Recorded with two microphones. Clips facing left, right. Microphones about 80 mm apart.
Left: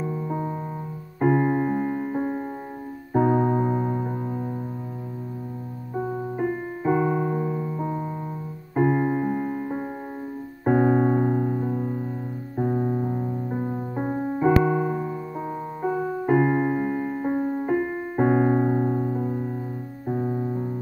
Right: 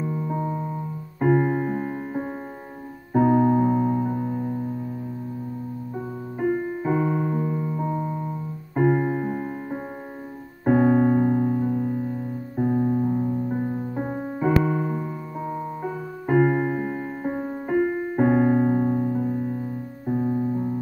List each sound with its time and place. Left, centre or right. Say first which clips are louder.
0.0 s music: right 1 dB; centre
3.1 s keyboard: right 2 dB; centre
6.4 s keyboard: right 3 dB; centre
8.7 s music: even; centre
10.6 s keyboard: right 1 dB; centre
12.7 s piano: right 6 dB; left
14.1 s music: left 3 dB; centre
16.3 s music: right 1 dB; centre
20.1 s piano: right 3 dB; centre